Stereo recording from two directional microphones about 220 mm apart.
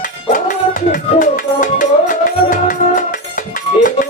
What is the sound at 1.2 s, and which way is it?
Music, 35° left (ahead or behind).